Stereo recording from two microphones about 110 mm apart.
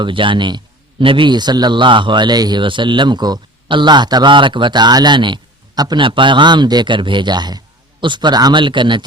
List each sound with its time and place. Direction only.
0.0 s a man's voice: 50° right (ahead or behind)